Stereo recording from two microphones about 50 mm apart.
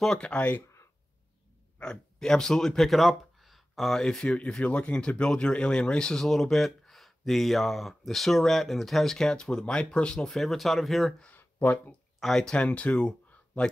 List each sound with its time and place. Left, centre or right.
0.2 s speech: left
1.8 s speech: centre
4.0 s speech: centre
10.1 s speech: centre
11.3 s a sound: left
12.2 s speech: centre
12.4 s speech: left